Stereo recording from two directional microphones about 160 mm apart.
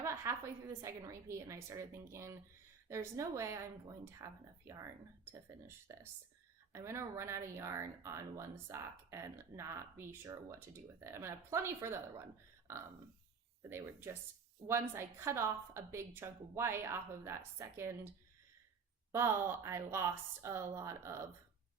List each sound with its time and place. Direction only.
0.0 s speech: 20° right (ahead or behind)
13.7 s speech: 15° right (ahead or behind)
19.1 s speech: 15° right (ahead or behind)